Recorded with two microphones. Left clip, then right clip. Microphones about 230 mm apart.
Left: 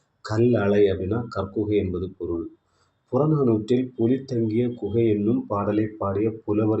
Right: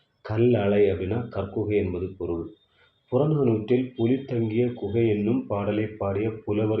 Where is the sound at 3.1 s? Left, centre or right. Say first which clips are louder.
Left 2 dB; left.